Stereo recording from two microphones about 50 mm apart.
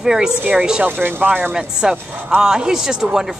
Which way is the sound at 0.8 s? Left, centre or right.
Right.